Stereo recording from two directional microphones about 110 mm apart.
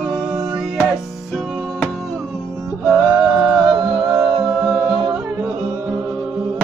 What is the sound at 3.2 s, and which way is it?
Music, 5° right (ahead or behind).